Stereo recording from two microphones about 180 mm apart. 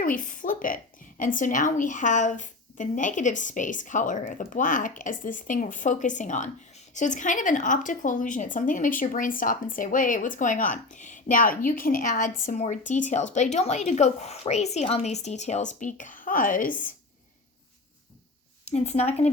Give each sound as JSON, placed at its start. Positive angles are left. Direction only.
{"t": 0.0, "sound": "a sound", "side_deg": 45}
{"t": 1.2, "sound": "a woman's voice", "side_deg": 45}
{"t": 18.6, "sound": "a woman's voice", "side_deg": 35}